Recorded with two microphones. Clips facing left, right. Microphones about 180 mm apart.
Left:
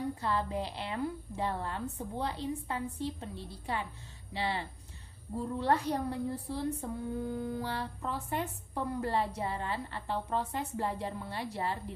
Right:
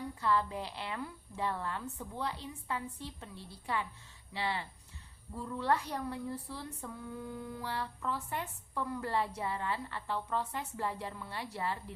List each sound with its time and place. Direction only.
0.2 s a woman's voice: 30° left (ahead or behind)
4.4 s a woman's voice: 30° left (ahead or behind)